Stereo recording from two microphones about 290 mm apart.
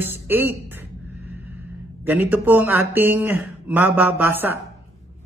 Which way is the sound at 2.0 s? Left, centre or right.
Centre.